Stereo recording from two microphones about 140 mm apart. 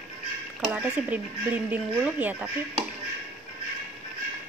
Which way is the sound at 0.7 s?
10° right (ahead or behind).